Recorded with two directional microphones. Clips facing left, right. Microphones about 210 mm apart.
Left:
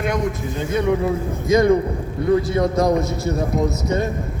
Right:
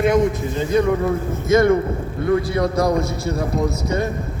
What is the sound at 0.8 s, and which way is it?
A man's voice, 15° left (ahead or behind).